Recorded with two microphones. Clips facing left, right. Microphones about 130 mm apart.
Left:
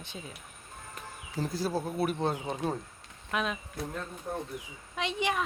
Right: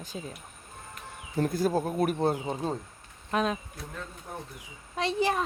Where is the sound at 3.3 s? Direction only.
35° right (ahead or behind).